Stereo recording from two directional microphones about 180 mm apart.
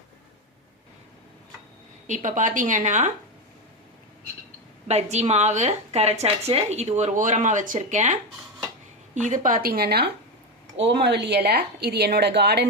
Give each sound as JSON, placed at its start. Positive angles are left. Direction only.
{"t": 2.0, "sound": "a woman's voice", "side_deg": -45}
{"t": 5.1, "sound": "a woman's voice", "side_deg": -35}
{"t": 9.2, "sound": "speech", "side_deg": -45}
{"t": 10.8, "sound": "a woman's voice", "side_deg": -70}